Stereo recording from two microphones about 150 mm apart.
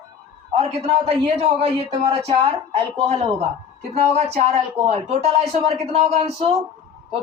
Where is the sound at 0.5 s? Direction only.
40° right (ahead or behind).